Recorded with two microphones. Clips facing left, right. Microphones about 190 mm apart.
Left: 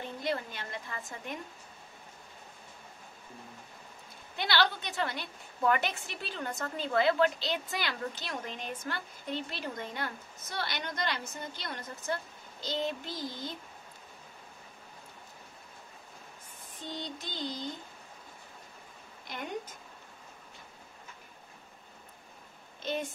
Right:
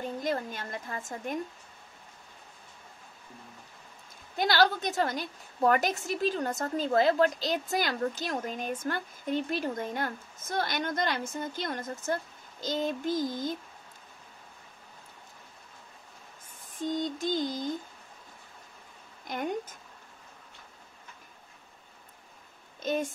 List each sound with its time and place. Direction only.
0.2 s a woman's voice: 45° right (ahead or behind)
4.4 s a woman's voice: 45° right (ahead or behind)
16.8 s a woman's voice: 45° right (ahead or behind)
19.2 s speech: 45° right (ahead or behind)
22.8 s speech: 45° right (ahead or behind)